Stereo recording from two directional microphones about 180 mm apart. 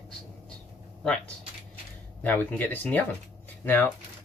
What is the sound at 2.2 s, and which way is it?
Speech, 10° left (ahead or behind).